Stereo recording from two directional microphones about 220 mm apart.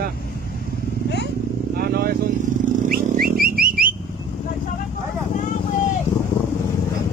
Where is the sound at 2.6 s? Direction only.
40° right (ahead or behind).